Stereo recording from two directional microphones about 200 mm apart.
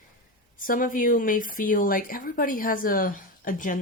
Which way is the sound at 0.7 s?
45° left (ahead or behind).